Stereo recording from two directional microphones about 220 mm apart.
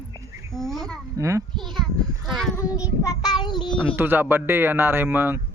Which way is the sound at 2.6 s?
15° left (ahead or behind).